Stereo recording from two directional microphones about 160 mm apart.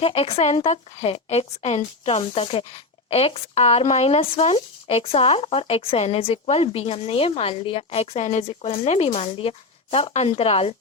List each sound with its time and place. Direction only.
0.0 s speech: 35° left (ahead or behind)